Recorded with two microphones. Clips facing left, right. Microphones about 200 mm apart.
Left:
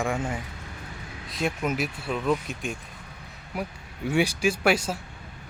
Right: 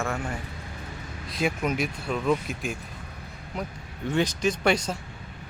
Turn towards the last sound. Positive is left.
turn(degrees=5)  # may be behind; listen again after turning